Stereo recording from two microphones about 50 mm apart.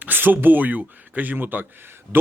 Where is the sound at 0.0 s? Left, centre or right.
Right.